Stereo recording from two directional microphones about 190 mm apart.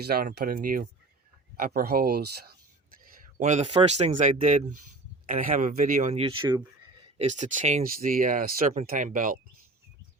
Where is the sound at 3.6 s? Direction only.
30° right (ahead or behind).